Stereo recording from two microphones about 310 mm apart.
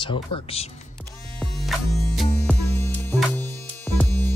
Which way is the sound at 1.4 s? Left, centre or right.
Centre.